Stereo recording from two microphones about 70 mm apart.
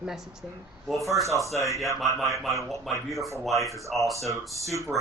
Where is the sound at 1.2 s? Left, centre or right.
Right.